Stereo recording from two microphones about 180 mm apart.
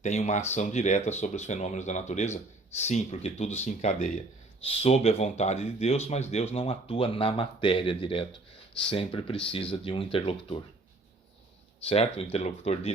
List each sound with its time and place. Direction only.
0.0 s speech: 40° left (ahead or behind)
11.9 s speech: 35° left (ahead or behind)